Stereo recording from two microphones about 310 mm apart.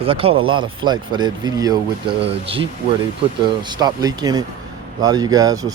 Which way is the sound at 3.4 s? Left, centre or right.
Centre.